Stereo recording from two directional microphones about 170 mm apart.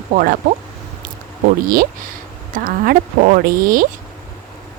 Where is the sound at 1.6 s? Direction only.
55° right (ahead or behind).